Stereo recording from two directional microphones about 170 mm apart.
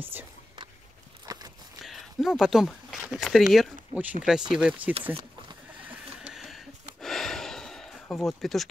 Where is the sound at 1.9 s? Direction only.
Centre (ahead or behind).